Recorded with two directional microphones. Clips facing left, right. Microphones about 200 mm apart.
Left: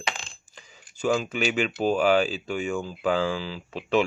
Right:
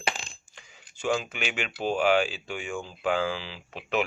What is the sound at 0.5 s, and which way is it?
Speech, 35° left (ahead or behind).